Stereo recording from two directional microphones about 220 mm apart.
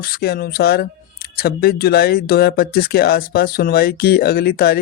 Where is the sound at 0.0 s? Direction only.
45° left (ahead or behind).